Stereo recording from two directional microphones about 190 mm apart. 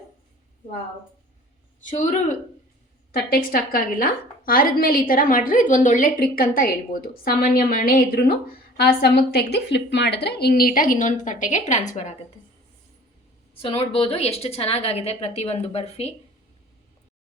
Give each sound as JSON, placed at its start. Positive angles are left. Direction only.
{"t": 1.8, "sound": "a woman's voice", "side_deg": 40}
{"t": 3.1, "sound": "a woman's voice", "side_deg": 50}
{"t": 13.6, "sound": "a woman's voice", "side_deg": 30}